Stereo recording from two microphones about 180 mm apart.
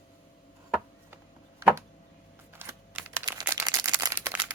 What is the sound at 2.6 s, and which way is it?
Computer keyboard, 15° right (ahead or behind).